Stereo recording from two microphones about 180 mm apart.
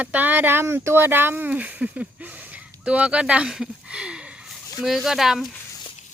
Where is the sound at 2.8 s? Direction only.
5° right (ahead or behind).